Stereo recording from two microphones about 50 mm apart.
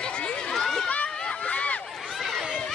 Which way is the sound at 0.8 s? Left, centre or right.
Left.